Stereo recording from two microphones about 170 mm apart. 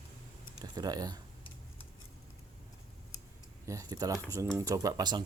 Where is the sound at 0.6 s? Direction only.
25° right (ahead or behind).